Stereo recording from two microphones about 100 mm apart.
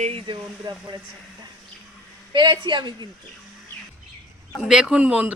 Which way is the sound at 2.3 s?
45° right (ahead or behind).